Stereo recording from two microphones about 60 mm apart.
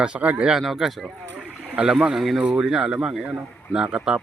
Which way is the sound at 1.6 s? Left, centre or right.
Centre.